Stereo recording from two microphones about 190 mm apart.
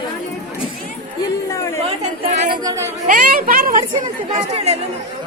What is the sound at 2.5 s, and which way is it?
Speech, 20° right (ahead or behind).